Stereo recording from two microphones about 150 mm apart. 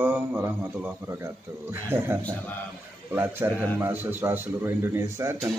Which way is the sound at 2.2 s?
10° left (ahead or behind).